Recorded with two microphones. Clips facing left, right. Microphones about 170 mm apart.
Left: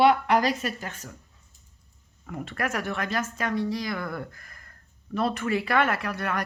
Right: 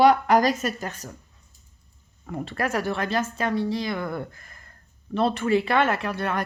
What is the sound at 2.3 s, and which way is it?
Speech, 30° right (ahead or behind).